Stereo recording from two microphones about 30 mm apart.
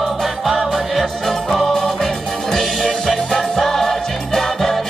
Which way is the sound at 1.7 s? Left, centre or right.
Centre.